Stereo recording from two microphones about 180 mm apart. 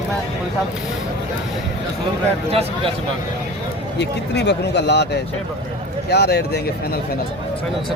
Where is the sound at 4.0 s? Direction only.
70° left (ahead or behind).